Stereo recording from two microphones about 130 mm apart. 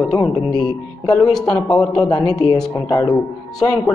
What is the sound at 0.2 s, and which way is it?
Speech, 30° left (ahead or behind).